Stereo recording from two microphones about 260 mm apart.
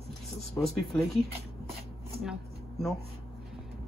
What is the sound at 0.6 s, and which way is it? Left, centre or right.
Speech, centre.